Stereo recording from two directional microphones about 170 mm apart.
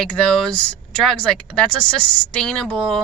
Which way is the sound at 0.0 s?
5° left (ahead or behind).